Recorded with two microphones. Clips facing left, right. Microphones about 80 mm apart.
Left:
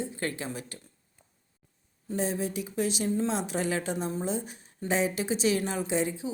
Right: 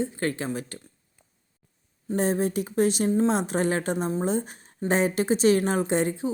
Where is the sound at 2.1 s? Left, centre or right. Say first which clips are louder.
Right 6 dB; right.